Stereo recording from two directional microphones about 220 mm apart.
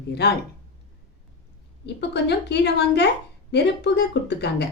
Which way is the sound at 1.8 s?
50° left (ahead or behind).